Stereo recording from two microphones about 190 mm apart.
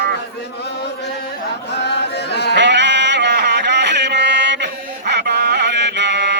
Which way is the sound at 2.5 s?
65° right (ahead or behind).